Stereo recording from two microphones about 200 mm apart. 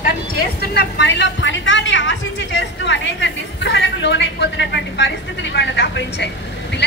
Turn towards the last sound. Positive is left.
turn(degrees=60)  # may be behind; listen again after turning